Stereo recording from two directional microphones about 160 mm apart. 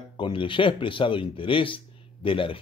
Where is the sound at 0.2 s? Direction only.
30° left (ahead or behind).